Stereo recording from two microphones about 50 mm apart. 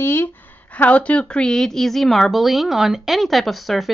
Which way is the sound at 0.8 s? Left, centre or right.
Left.